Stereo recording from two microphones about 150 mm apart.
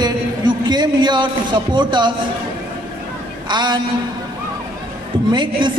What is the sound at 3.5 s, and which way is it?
Speech, 30° right (ahead or behind).